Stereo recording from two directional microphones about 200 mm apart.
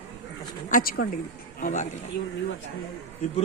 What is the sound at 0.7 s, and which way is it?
Speech, 45° left (ahead or behind).